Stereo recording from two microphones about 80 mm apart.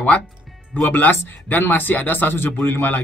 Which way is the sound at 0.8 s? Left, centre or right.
Left.